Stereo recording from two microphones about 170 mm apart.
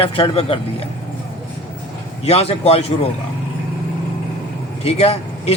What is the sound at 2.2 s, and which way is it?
Speech, 35° left (ahead or behind).